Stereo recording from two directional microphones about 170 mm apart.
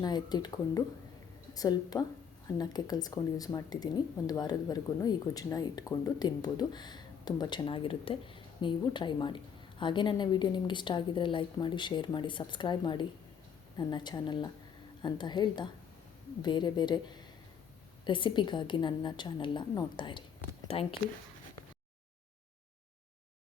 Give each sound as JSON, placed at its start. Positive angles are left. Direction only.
{"t": 0.0, "sound": "speech", "side_deg": 25}